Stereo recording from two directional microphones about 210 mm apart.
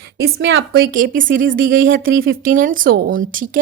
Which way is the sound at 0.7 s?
45° right (ahead or behind).